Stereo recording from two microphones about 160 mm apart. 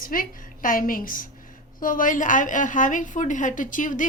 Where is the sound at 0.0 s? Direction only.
60° left (ahead or behind).